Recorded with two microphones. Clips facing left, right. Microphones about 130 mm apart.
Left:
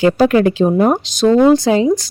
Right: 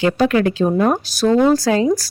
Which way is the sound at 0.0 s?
30° left (ahead or behind).